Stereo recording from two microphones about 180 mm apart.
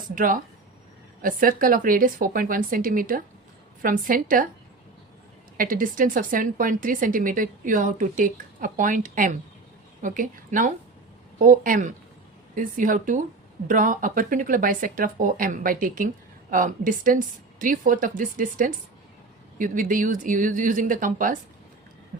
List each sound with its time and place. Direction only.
0.1 s speech: 50° right (ahead or behind)
5.5 s speech: 50° right (ahead or behind)